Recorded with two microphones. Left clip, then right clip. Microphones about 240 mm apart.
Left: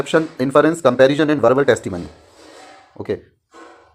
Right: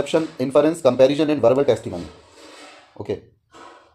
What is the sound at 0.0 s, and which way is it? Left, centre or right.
Speech, left.